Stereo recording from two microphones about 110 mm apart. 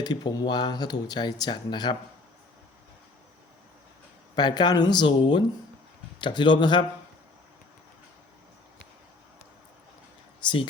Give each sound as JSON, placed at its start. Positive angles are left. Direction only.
{"t": 0.0, "sound": "speech", "side_deg": 40}
{"t": 4.4, "sound": "speech", "side_deg": 40}
{"t": 10.4, "sound": "speech", "side_deg": 50}